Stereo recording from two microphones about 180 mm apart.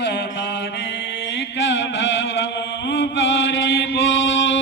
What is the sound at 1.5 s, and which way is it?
Chant, 90° left.